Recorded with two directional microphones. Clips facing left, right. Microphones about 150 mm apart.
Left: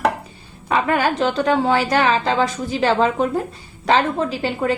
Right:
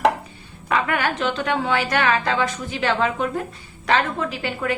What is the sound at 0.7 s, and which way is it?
A woman's voice, 30° left (ahead or behind).